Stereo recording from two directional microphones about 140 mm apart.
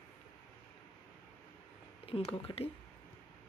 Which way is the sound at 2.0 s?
45° left (ahead or behind).